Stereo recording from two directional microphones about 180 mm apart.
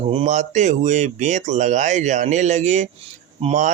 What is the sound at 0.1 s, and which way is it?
A man's voice, 35° right (ahead or behind).